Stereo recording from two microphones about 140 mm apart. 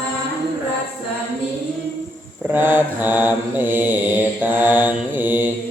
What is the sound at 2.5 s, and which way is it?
Mantra, 15° right (ahead or behind).